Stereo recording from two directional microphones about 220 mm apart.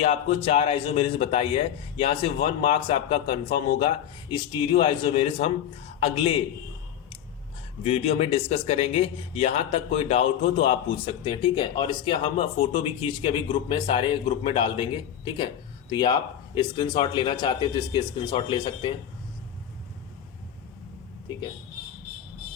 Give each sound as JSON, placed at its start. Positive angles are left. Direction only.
{"t": 0.0, "sound": "a man's voice", "side_deg": 30}
{"t": 7.9, "sound": "a man's voice", "side_deg": 25}